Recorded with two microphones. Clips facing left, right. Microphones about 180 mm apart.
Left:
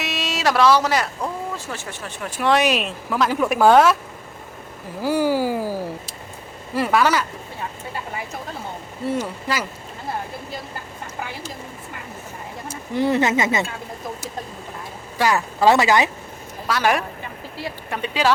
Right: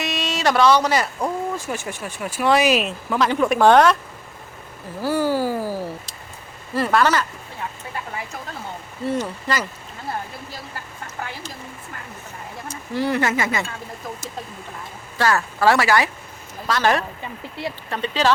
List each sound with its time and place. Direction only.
0.0 s a sound: 5° left (ahead or behind)
1.2 s speech: 15° right (ahead or behind); by 3.9 s 5° left (ahead or behind)
4.9 s speech: 15° left (ahead or behind)
9.0 s speech: 10° left (ahead or behind)
12.9 s speech: 20° left (ahead or behind)
15.2 s speech: 15° left (ahead or behind)